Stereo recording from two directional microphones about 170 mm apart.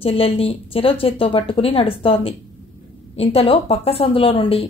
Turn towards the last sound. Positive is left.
turn(degrees=35)  # may be behind; listen again after turning